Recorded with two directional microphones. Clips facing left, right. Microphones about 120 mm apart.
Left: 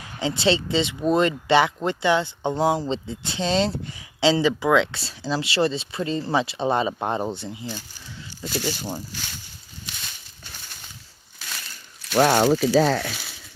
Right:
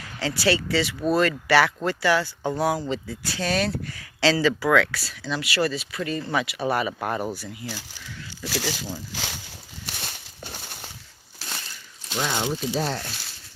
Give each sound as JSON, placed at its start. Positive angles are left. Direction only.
{"t": 0.2, "sound": "speech", "side_deg": 20}
{"t": 8.4, "sound": "speech", "side_deg": -90}
{"t": 9.8, "sound": "walk", "side_deg": -55}
{"t": 11.4, "sound": "a sound", "side_deg": -30}
{"t": 12.1, "sound": "speech", "side_deg": 60}